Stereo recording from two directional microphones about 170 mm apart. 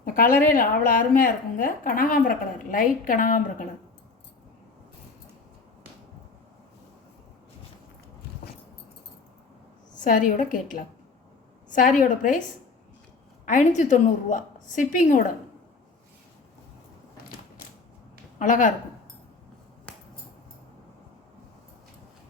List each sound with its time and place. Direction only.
0.0 s a sound: 55° left (ahead or behind)
0.4 s a woman's voice: 55° left (ahead or behind)
10.0 s a woman's voice: 50° left (ahead or behind)
13.4 s a woman's voice: 50° left (ahead or behind)
18.3 s a woman's voice: 50° left (ahead or behind)